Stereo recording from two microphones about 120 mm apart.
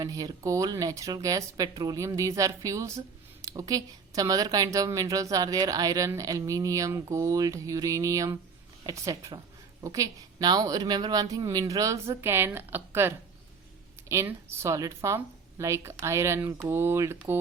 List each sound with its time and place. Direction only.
0.0 s a woman's voice: 30° right (ahead or behind)